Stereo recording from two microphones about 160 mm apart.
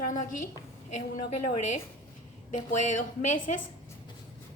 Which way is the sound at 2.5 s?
50° left (ahead or behind).